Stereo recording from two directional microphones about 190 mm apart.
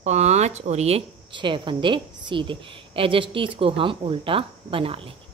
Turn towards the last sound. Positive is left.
turn(degrees=-30)  # may be behind; listen again after turning